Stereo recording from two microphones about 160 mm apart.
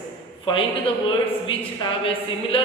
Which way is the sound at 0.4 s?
35° left (ahead or behind).